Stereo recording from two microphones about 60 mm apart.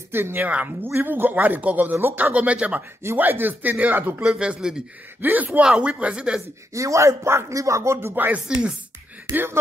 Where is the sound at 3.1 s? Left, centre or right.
Right.